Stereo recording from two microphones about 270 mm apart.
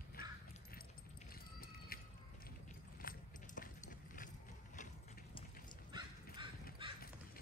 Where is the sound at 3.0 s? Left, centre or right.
Left.